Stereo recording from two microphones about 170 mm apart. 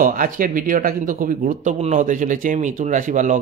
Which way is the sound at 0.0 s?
55° right (ahead or behind).